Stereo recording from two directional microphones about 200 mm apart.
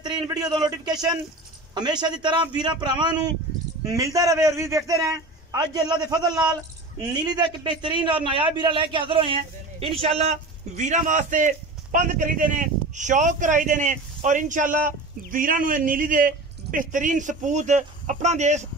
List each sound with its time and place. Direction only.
0.3 s a man's voice: 20° right (ahead or behind); by 18.7 s 35° right (ahead or behind)